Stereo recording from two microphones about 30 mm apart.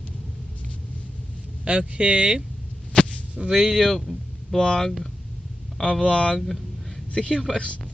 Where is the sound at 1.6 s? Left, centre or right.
Right.